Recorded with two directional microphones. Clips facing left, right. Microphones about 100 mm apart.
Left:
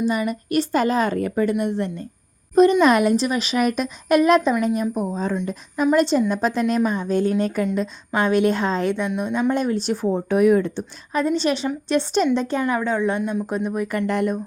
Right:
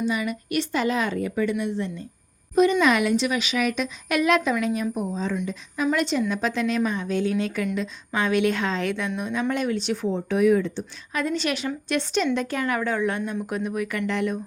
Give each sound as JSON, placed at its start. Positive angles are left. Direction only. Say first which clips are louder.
{"t": 0.1, "sound": "a woman's voice", "louder": "left 4 dB", "side_deg": 40}
{"t": 2.8, "sound": "a woman's voice", "louder": "left 4 dB", "side_deg": 40}
{"t": 5.8, "sound": "a woman's voice", "louder": "left 5 dB", "side_deg": 35}
{"t": 9.0, "sound": "speech", "louder": "left 4 dB", "side_deg": 15}
{"t": 9.3, "sound": "a woman's voice", "louder": "left 4 dB", "side_deg": 30}
{"t": 11.1, "sound": "a woman's voice", "louder": "left 5 dB", "side_deg": 35}
{"t": 13.5, "sound": "a woman's voice", "louder": "left 3 dB", "side_deg": 30}